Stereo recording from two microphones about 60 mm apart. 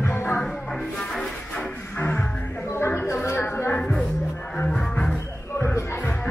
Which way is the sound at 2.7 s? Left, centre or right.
Left.